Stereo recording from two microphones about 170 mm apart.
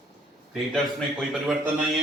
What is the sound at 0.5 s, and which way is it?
Speech, centre (ahead or behind).